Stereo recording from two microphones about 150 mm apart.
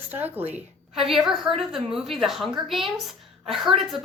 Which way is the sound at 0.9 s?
Centre (ahead or behind).